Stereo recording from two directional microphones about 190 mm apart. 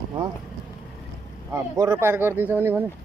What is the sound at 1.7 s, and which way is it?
Speech, 15° right (ahead or behind).